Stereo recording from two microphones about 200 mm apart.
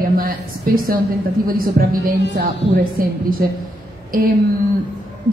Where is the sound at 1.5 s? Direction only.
45° right (ahead or behind).